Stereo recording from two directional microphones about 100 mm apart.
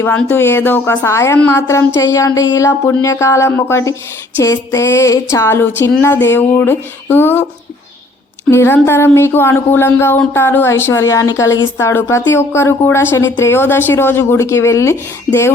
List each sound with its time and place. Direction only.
0.0 s speech: 15° left (ahead or behind)
8.4 s speech: 25° left (ahead or behind)